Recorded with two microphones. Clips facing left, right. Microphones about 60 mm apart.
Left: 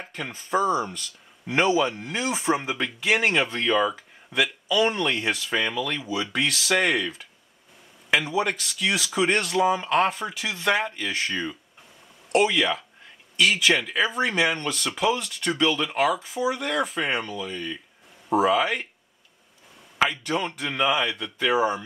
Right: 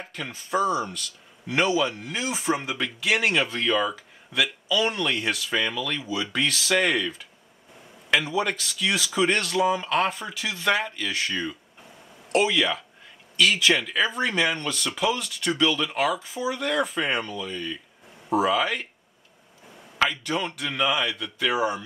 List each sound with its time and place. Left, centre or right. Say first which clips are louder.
0.0 s a sound: left 1 dB; centre
0.6 s a man's voice: left 1 dB; left
2.1 s speech: left 3 dB; left
3.0 s a man's voice: left 1 dB; centre
8.3 s speech: left 1 dB; centre
12.3 s a man's voice: left 1 dB; centre
20.0 s speech: left 1 dB; centre